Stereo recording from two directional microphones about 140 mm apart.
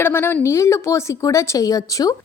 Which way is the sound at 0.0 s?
15° left (ahead or behind).